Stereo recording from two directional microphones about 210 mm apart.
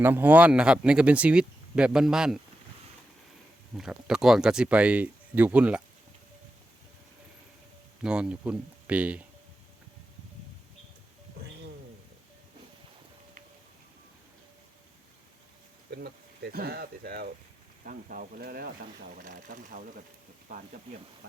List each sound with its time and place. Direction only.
0.0 s speech: 10° right (ahead or behind)
3.8 s speech: 5° right (ahead or behind)
8.0 s speech: 5° right (ahead or behind)
15.9 s speech: 50° right (ahead or behind)